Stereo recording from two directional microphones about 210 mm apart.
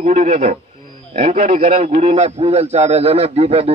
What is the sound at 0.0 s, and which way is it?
A man's voice, 30° right (ahead or behind).